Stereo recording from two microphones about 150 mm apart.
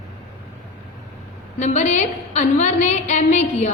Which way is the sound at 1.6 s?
50° left (ahead or behind).